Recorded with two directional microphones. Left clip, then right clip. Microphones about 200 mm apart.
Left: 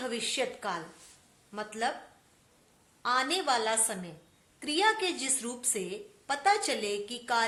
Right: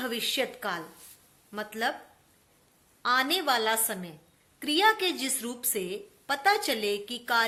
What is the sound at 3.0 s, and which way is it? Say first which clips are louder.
A woman's voice: right 3 dB; 40° right (ahead or behind).